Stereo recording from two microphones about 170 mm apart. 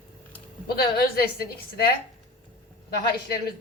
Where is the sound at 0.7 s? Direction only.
65° left (ahead or behind).